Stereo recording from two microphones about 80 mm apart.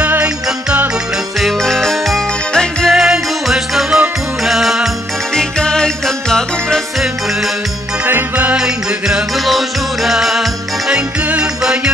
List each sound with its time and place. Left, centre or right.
0.0 s music: centre
1.4 s music: centre
2.9 s music: centre
8.0 s music: right
8.5 s music: centre
11.0 s music: centre